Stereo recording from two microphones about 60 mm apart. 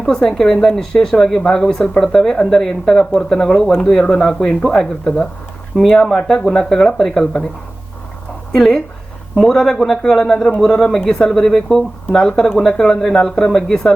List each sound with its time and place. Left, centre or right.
0.0 s speech: centre
5.7 s speech: centre
8.5 s a man's voice: centre